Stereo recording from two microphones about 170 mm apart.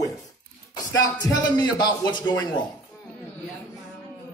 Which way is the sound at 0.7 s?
20° left (ahead or behind).